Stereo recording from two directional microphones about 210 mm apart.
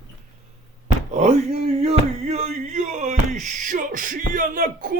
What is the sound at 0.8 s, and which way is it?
Speech, 30° right (ahead or behind).